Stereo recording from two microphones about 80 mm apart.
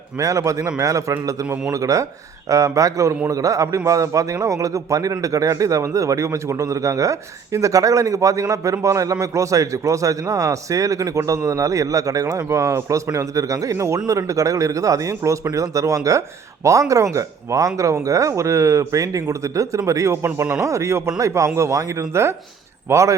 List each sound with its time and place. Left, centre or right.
0.2 s a man's voice: right